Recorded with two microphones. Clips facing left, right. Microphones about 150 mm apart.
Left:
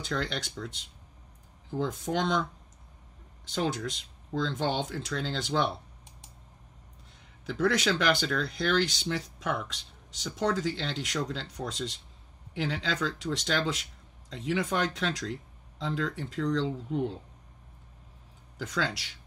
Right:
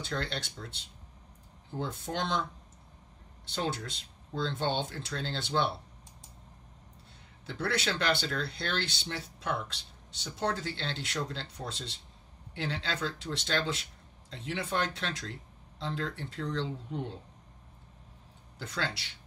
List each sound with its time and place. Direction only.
0.0 s speech: 90° left
3.4 s speech: 90° left
7.4 s speech: 90° left
18.6 s speech: 90° left